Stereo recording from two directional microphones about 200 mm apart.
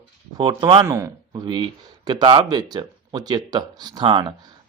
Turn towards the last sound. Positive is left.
turn(degrees=-25)  # may be behind; listen again after turning